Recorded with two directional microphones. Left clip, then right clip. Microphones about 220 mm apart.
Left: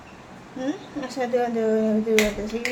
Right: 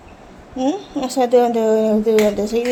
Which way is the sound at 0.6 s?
25° right (ahead or behind).